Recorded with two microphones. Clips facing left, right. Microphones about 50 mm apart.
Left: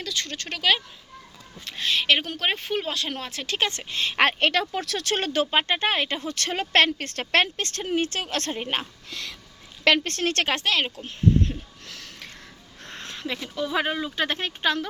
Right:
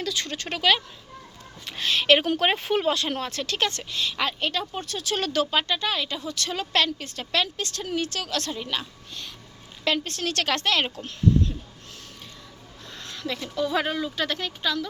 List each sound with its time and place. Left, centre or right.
0.0 s speech: centre
3.4 s speech: left
3.9 s speech: left
4.2 s speech: left
5.2 s speech: left
9.0 s speech: left
9.8 s a woman's voice: left
10.6 s speech: centre
11.9 s a sound: left
12.8 s a sound: left
13.1 s a sound: left
13.6 s speech: centre
14.2 s speech: left